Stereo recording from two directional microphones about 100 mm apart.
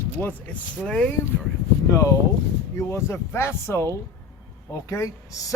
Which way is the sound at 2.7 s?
25° left (ahead or behind).